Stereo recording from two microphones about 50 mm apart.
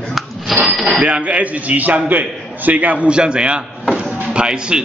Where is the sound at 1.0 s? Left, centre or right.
Right.